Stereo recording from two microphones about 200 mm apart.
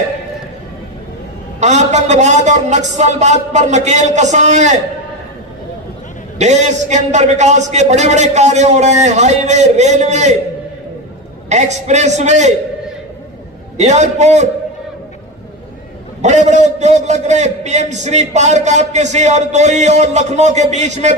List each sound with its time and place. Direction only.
1.5 s a man's voice: 35° right (ahead or behind)
6.4 s a man's voice: 35° right (ahead or behind)
11.4 s a man's voice: 35° right (ahead or behind)
13.7 s a man's voice: 35° right (ahead or behind)
16.2 s a man's voice: 35° right (ahead or behind)